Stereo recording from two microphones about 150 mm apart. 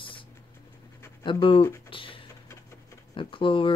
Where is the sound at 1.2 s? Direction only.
35° left (ahead or behind).